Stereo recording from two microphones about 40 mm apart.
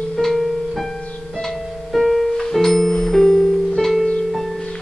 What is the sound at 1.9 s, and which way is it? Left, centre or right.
Music, centre.